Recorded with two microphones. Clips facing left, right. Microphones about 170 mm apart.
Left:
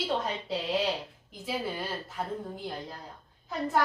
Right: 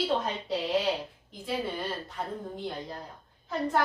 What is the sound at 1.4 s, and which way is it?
Speech, 5° left (ahead or behind).